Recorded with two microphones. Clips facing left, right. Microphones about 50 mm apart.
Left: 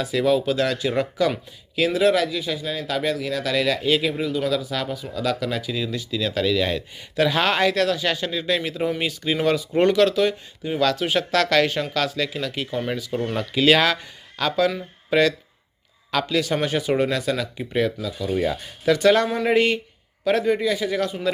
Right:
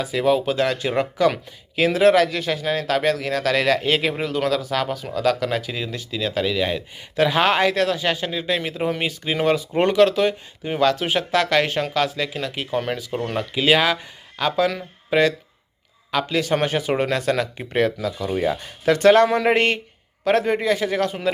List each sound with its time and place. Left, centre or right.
0.0 s speech: right
13.3 s speech: centre
16.3 s speech: right
18.3 s speech: right